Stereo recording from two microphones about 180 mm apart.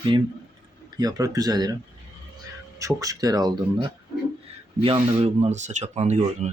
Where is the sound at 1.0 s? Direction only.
20° right (ahead or behind).